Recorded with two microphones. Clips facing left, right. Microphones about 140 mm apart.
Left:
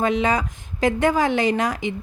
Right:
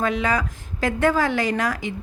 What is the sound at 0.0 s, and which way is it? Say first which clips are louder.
A woman's voice: left 2 dB; 20° left (ahead or behind).